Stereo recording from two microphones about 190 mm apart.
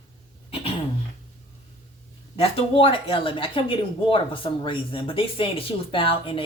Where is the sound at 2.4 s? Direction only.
30° left (ahead or behind).